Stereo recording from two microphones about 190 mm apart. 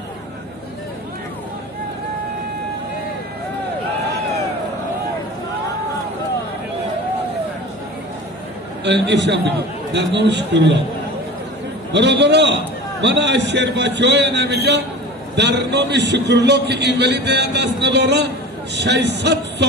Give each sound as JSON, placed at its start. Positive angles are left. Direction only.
{"t": 8.8, "sound": "a man's voice", "side_deg": -65}
{"t": 11.9, "sound": "a man's voice", "side_deg": -65}